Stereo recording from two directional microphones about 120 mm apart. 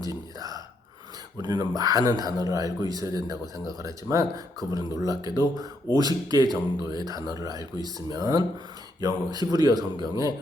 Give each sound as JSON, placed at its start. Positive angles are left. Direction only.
{"t": 0.0, "sound": "gasp", "side_deg": -30}
{"t": 1.4, "sound": "speech", "side_deg": -35}